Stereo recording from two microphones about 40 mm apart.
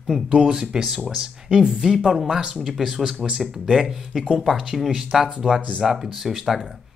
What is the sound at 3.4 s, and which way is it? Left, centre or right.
Speech, centre.